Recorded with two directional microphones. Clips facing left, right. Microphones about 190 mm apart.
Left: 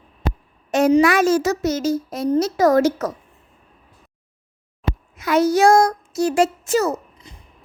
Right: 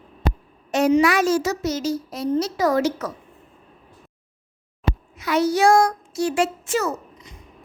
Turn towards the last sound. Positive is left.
turn(degrees=35)  # may be behind; listen again after turning